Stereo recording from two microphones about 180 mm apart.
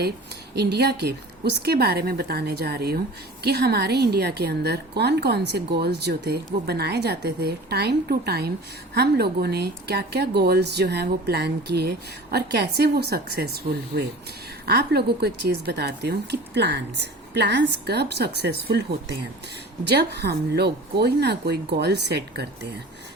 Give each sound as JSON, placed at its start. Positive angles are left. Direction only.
{"t": 0.5, "sound": "a woman's voice", "side_deg": -65}
{"t": 19.8, "sound": "speech", "side_deg": -70}